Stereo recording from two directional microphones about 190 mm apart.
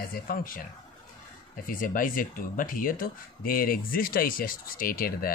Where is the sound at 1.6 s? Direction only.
45° left (ahead or behind).